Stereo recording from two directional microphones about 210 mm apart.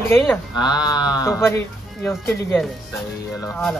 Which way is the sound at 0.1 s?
15° left (ahead or behind).